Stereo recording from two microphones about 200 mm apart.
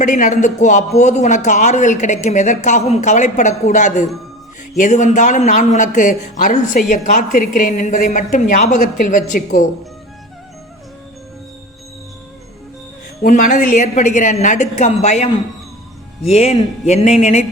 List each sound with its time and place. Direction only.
0.0 s speech: 40° left (ahead or behind)
13.2 s speech: 40° left (ahead or behind)